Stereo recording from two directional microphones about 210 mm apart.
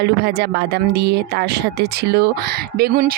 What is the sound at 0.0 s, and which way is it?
Speech, 55° right (ahead or behind).